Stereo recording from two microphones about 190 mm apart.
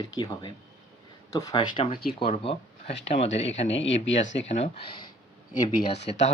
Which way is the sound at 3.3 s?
75° left (ahead or behind).